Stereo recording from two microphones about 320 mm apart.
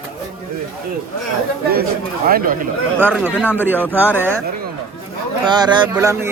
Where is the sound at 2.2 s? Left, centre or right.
Right.